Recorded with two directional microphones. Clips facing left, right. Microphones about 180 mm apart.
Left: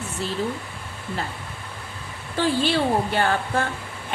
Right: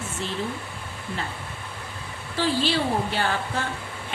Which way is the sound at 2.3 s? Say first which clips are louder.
Left 2 dB; 50° left (ahead or behind).